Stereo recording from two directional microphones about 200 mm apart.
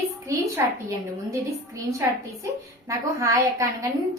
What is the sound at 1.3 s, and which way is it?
A woman's voice, 15° right (ahead or behind).